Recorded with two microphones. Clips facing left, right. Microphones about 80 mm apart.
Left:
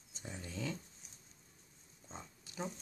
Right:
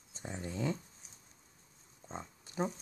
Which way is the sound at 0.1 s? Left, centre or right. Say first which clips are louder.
Right 5 dB; right.